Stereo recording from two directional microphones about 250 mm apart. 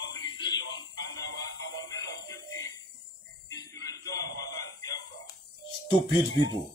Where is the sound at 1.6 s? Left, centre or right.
Left.